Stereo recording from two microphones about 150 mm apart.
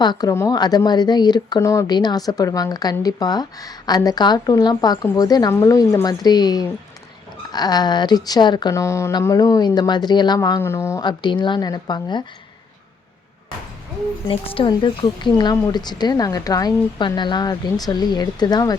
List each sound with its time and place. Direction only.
0.0 s speech: 25° left (ahead or behind)
11.0 s speech: 30° left (ahead or behind)
14.3 s speech: 35° left (ahead or behind)